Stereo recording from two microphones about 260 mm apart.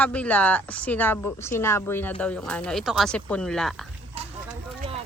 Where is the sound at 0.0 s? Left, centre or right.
Centre.